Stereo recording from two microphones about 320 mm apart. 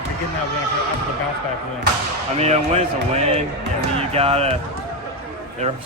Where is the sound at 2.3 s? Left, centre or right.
Centre.